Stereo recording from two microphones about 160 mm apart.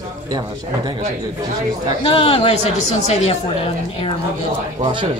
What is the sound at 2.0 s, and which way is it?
Speech, 35° left (ahead or behind).